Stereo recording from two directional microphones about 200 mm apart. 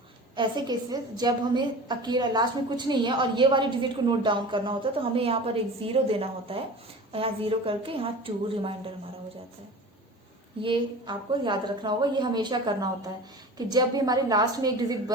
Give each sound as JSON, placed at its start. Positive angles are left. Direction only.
{"t": 0.3, "sound": "a woman's voice", "side_deg": -20}
{"t": 10.6, "sound": "a woman's voice", "side_deg": -25}